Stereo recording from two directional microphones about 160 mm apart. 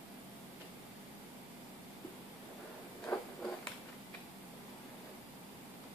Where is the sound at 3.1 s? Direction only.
15° left (ahead or behind).